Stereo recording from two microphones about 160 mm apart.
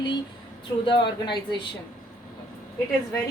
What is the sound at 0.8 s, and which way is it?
Speech, 30° left (ahead or behind).